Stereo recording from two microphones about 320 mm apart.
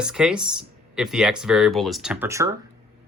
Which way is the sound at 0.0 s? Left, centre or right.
Centre.